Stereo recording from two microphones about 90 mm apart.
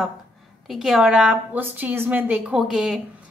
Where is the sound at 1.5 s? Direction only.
20° right (ahead or behind).